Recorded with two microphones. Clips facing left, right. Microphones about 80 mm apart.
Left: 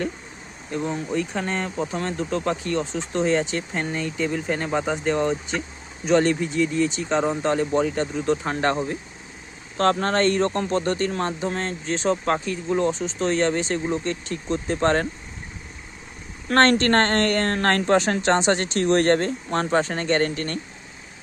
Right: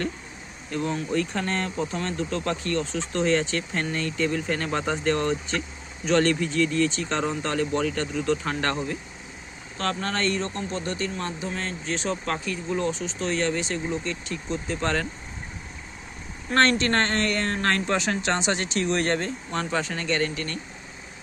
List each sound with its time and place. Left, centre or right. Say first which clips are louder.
0.7 s speech: left 1 dB; centre
9.7 s speech: left 8 dB; left
16.6 s speech: left 4 dB; left